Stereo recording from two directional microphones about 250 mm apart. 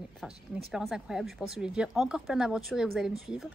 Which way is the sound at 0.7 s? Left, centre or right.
Centre.